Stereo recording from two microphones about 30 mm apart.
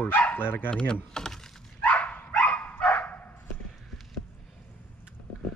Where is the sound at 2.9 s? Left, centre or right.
Left.